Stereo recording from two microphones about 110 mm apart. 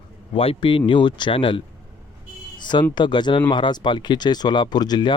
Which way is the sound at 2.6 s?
45° left (ahead or behind).